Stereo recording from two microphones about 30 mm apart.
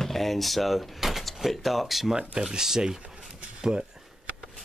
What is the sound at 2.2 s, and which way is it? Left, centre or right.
Speech, right.